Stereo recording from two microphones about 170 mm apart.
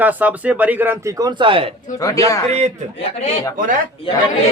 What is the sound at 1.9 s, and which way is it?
Speech, 20° left (ahead or behind).